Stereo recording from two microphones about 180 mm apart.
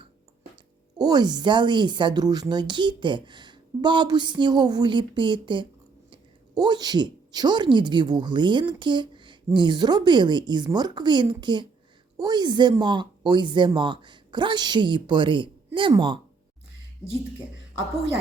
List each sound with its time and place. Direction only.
0.9 s a woman's voice: 20° right (ahead or behind)